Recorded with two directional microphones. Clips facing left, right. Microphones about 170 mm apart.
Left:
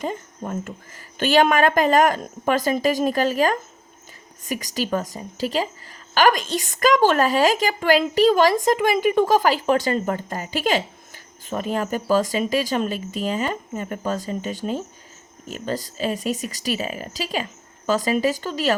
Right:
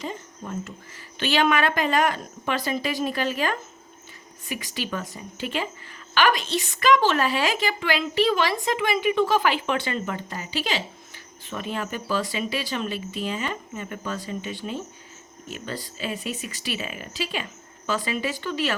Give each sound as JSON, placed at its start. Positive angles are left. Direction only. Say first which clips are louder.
{"t": 0.0, "sound": "a woman's voice", "louder": "left 5 dB", "side_deg": 50}